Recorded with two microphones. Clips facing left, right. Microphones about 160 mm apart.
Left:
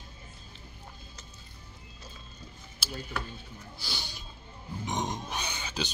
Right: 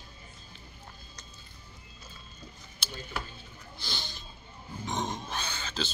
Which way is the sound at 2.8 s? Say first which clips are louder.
Left 3 dB; 5° left (ahead or behind).